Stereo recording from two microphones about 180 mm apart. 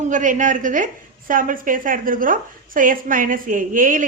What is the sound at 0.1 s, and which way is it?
A woman's voice, 45° right (ahead or behind).